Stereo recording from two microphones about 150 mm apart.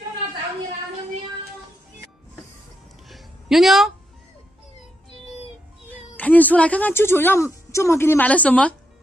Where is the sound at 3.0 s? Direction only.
Centre (ahead or behind).